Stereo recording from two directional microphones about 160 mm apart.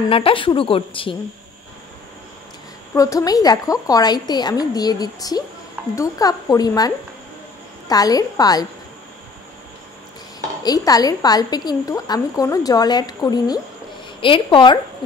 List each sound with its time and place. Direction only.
0.1 s a woman's voice: 35° left (ahead or behind)
2.9 s a woman's voice: 20° left (ahead or behind)
7.9 s a woman's voice: 25° left (ahead or behind)
10.6 s a woman's voice: 25° left (ahead or behind)